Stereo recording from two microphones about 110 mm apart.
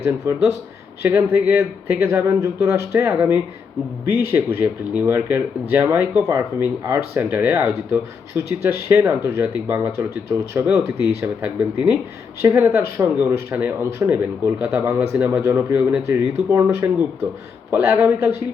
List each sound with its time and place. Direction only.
1.0 s speech: 20° right (ahead or behind)
11.4 s speech: 15° right (ahead or behind)